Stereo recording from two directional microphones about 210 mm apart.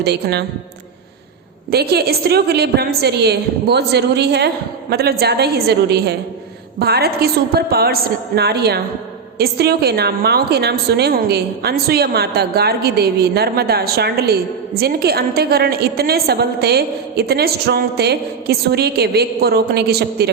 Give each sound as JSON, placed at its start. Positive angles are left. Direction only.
{"t": 0.0, "sound": "a woman's voice", "side_deg": -50}
{"t": 1.7, "sound": "a woman's voice", "side_deg": -50}